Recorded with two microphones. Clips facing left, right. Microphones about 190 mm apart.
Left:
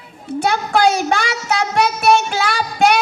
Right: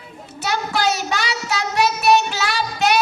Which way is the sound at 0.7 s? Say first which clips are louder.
Left 7 dB; 50° left (ahead or behind).